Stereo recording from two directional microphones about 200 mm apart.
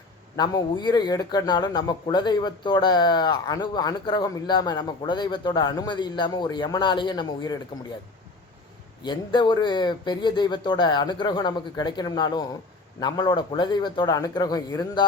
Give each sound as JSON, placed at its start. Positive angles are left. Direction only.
{"t": 0.3, "sound": "speech", "side_deg": 20}
{"t": 9.0, "sound": "speech", "side_deg": 20}